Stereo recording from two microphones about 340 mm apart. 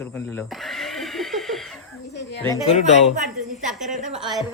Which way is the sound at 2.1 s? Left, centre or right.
Left.